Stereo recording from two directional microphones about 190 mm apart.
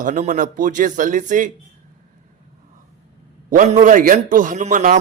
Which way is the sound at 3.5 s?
40° right (ahead or behind).